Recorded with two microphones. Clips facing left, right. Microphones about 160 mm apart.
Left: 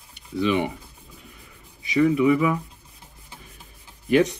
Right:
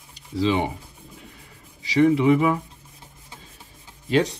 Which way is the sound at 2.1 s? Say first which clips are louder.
Even; 25° right (ahead or behind).